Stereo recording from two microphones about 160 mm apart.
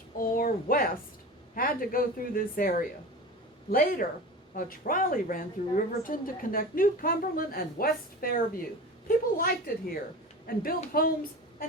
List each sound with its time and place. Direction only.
0.2 s a woman's voice: 65° left (ahead or behind)